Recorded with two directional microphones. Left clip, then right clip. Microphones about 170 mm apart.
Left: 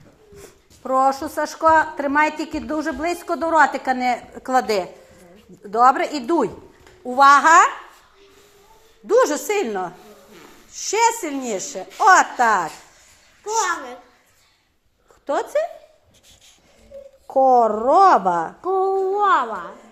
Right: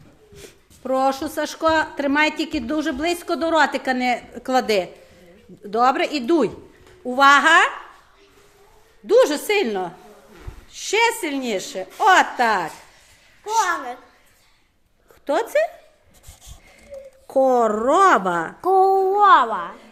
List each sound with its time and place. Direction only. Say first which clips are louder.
0.3 s a sound: right 1 dB; 25° right (ahead or behind)
1.5 s speech: left 4 dB; 25° right (ahead or behind)
5.7 s speech: left 3 dB; 25° right (ahead or behind)
7.2 s a woman's voice: left 1 dB; 40° right (ahead or behind)
7.4 s a woman's voice: left 2 dB; 15° right (ahead or behind)
9.0 s a woman's voice: right 1 dB; 10° right (ahead or behind)
10.7 s a sound: right 1 dB; 10° right (ahead or behind)
11.2 s a woman's voice: right 1 dB; 10° right (ahead or behind)
15.3 s speech: right 2 dB; 20° right (ahead or behind)
17.2 s speech: left 2 dB; 25° right (ahead or behind)